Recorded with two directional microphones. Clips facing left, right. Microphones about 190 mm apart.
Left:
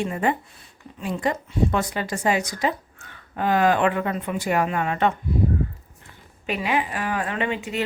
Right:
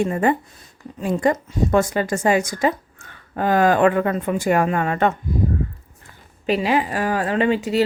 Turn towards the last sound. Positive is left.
turn(degrees=-35)  # may be behind; listen again after turning